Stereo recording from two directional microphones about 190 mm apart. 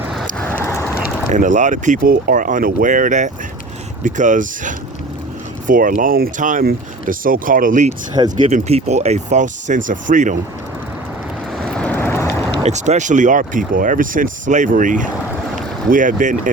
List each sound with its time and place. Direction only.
0.0 s horse: centre (ahead or behind)
1.3 s speech: 40° right (ahead or behind)
11.5 s vehicle: 5° left (ahead or behind)
12.6 s speech: 35° right (ahead or behind)